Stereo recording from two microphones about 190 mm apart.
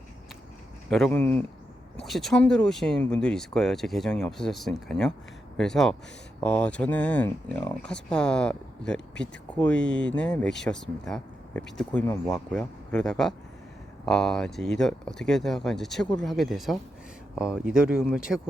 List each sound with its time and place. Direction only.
0.9 s speech: centre (ahead or behind)